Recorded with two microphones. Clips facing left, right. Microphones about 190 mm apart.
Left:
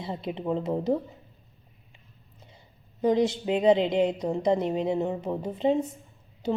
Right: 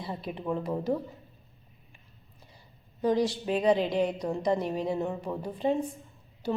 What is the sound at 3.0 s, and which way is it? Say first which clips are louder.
A woman's voice: left 3 dB; 20° left (ahead or behind).